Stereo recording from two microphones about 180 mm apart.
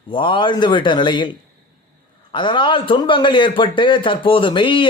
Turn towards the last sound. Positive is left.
turn(degrees=25)  # may be behind; listen again after turning